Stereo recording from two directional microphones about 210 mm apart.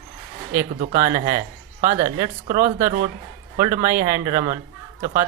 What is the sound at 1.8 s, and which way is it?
Speech, 35° right (ahead or behind).